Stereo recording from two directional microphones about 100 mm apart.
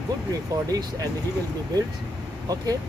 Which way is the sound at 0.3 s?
35° right (ahead or behind).